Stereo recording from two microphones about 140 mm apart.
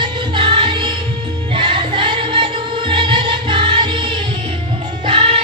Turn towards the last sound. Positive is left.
turn(degrees=-40)  # may be behind; listen again after turning